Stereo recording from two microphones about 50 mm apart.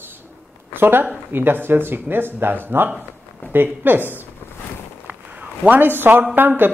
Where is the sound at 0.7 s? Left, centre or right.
Right.